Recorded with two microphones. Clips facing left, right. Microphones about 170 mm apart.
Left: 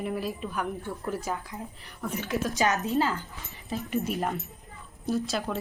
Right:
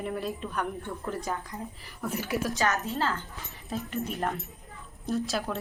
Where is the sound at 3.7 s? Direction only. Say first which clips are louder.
Left 3 dB; centre (ahead or behind).